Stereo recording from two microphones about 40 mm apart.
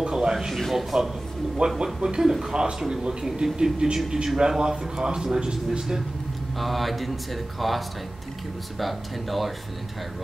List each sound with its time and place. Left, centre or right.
0.0 s a sound: centre
0.5 s speech: centre
1.8 s speech: right
6.6 s speech: centre